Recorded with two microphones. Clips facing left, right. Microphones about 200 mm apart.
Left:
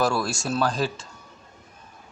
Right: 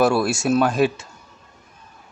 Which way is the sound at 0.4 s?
20° right (ahead or behind).